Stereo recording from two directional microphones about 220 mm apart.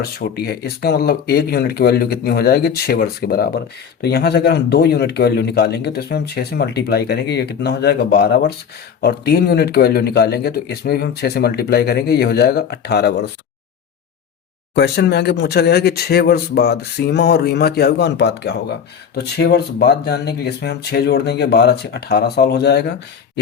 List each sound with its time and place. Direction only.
0.0 s speech: 45° left (ahead or behind)
14.8 s speech: 50° left (ahead or behind)